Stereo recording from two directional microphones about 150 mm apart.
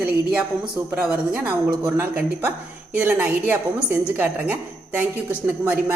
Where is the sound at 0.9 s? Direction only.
10° right (ahead or behind).